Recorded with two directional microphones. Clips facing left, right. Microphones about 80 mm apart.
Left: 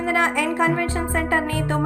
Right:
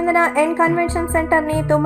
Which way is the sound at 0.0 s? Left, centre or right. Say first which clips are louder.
Right 6 dB; right.